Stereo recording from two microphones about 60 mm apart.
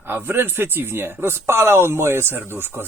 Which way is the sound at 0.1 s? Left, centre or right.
Right.